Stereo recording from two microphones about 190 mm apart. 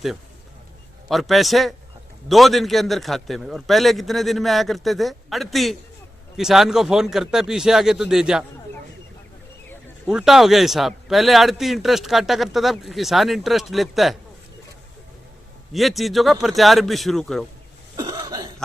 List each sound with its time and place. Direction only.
1.0 s a man's voice: centre (ahead or behind)
10.1 s a man's voice: 5° right (ahead or behind)
15.7 s a man's voice: centre (ahead or behind)
17.9 s cough: 20° right (ahead or behind)